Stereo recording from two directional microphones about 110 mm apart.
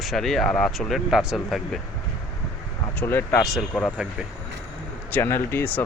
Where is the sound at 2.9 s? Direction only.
20° left (ahead or behind).